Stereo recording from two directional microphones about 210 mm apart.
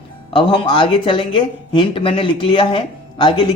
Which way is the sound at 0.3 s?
25° left (ahead or behind).